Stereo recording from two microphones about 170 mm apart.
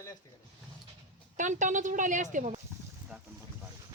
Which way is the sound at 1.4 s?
45° right (ahead or behind).